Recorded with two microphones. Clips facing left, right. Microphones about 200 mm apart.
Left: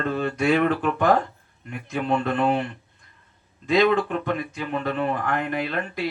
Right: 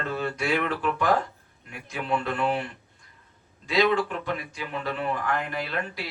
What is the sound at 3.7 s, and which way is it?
Speech, 50° left (ahead or behind).